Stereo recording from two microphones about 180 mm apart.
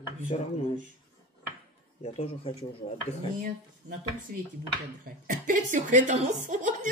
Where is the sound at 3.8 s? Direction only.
40° right (ahead or behind).